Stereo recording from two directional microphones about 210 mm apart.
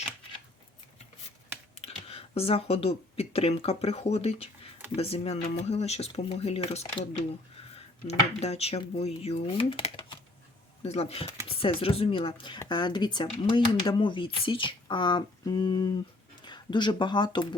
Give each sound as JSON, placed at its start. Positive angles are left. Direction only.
{"t": 1.8, "sound": "speech", "side_deg": 30}